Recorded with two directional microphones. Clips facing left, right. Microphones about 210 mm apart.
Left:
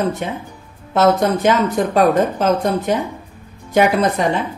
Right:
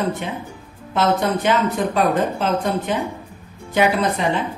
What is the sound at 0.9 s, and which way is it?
A woman's voice, 45° left (ahead or behind).